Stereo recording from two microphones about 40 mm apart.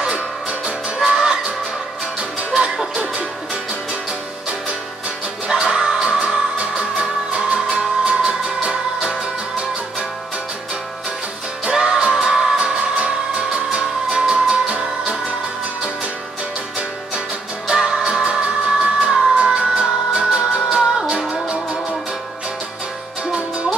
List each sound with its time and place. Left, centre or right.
0.1 s music: right
1.0 s music: centre
2.9 s music: right
5.5 s music: centre
11.6 s music: centre
13.5 s music: right
17.6 s music: centre
18.9 s music: right